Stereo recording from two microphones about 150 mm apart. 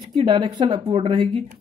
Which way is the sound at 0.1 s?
35° right (ahead or behind).